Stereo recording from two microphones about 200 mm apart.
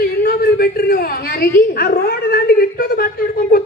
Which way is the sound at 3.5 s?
50° left (ahead or behind).